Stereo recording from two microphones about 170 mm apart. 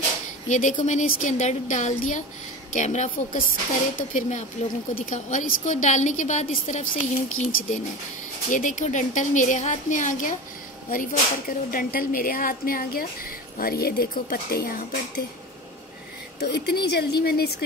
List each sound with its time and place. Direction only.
0.5 s a woman's voice: 45° left (ahead or behind); by 15.2 s 65° left (ahead or behind)
16.3 s a woman's voice: 75° left (ahead or behind)